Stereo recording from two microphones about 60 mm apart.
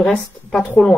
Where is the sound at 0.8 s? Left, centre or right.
Centre.